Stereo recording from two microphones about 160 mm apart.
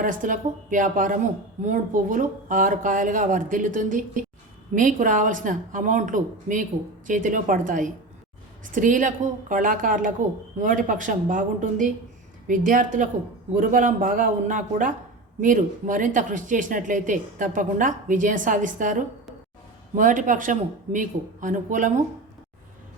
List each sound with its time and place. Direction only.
0.0 s speech: 55° right (ahead or behind)